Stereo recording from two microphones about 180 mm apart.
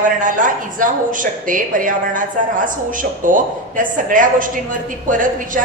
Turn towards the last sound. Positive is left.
turn(degrees=-45)  # may be behind; listen again after turning